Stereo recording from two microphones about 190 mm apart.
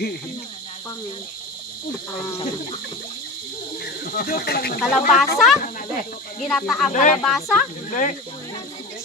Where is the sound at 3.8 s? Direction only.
50° left (ahead or behind).